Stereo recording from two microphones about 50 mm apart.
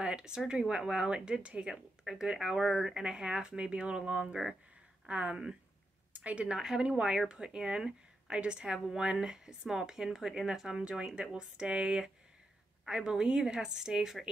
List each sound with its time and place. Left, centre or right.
0.0 s a sound: centre
0.5 s speech: centre
5.0 s speech: right
6.6 s speech: centre
10.8 s speech: centre